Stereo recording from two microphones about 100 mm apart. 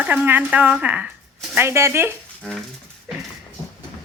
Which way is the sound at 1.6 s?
25° right (ahead or behind).